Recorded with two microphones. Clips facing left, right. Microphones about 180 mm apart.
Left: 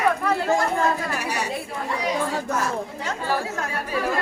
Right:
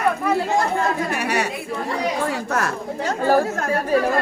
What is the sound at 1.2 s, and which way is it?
Speech, 65° right (ahead or behind).